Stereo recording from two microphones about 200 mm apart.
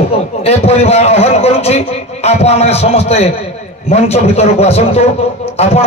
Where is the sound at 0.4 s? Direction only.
30° left (ahead or behind).